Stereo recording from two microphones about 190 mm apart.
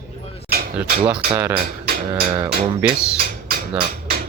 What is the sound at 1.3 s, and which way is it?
Speech, 15° right (ahead or behind).